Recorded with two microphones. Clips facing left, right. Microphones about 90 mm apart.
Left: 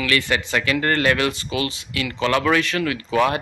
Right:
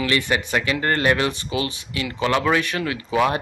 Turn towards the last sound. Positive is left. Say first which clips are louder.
# left 2 dB
turn(degrees=-20)  # may be behind; listen again after turning